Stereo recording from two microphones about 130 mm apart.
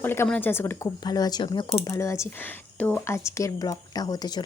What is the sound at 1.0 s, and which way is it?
Speech, 30° left (ahead or behind).